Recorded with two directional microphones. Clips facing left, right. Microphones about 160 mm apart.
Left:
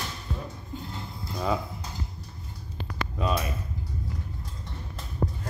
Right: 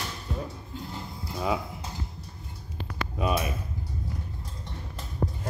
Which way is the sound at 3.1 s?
15° right (ahead or behind).